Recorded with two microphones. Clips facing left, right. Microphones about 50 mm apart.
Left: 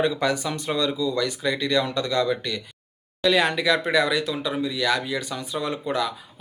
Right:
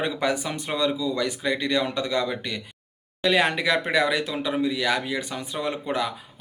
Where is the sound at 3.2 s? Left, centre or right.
Right.